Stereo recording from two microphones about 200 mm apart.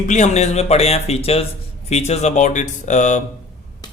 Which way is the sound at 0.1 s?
35° left (ahead or behind).